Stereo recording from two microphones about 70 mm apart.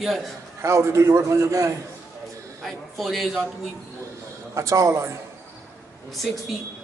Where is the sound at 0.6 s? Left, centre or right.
Right.